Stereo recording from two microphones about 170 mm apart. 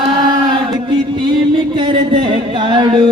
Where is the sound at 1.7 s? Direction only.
25° right (ahead or behind).